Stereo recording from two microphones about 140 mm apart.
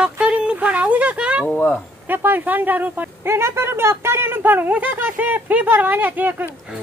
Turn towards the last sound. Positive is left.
turn(degrees=-10)  # may be behind; listen again after turning